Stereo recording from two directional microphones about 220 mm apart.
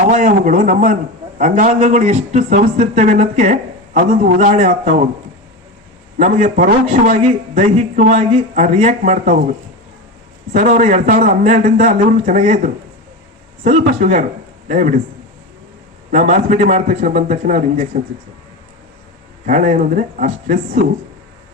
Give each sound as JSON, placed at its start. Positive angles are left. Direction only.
{"t": 0.0, "sound": "a man's voice", "side_deg": -35}
{"t": 6.1, "sound": "a man's voice", "side_deg": -35}
{"t": 10.5, "sound": "a man's voice", "side_deg": -35}
{"t": 16.1, "sound": "a man's voice", "side_deg": -35}
{"t": 19.5, "sound": "a man's voice", "side_deg": -35}